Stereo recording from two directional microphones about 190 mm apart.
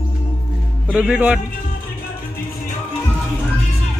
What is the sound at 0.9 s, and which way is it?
Speech, 5° right (ahead or behind).